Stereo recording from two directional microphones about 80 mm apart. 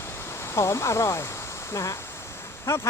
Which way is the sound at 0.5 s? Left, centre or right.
Left.